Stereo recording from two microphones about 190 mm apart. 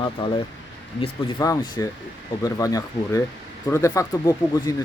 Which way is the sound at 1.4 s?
15° left (ahead or behind).